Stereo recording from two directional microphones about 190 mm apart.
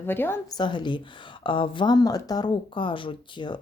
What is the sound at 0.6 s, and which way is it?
Speech, 25° left (ahead or behind).